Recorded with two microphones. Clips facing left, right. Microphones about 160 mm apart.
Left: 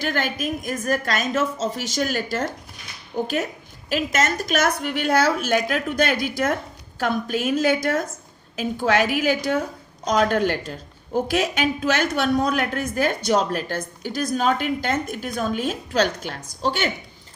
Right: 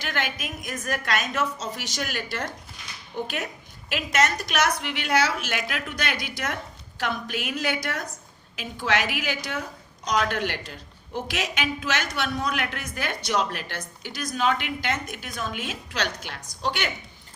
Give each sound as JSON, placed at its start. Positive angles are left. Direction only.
{"t": 0.0, "sound": "a woman's voice", "side_deg": 45}